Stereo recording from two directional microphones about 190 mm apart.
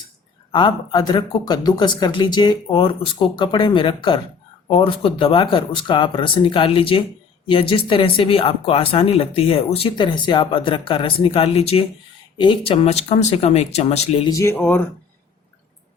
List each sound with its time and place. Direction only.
0.5 s speech: 25° left (ahead or behind)
14.3 s speech: 15° left (ahead or behind)